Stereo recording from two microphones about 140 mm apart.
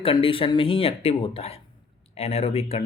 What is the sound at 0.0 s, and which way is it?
Speech, 40° left (ahead or behind).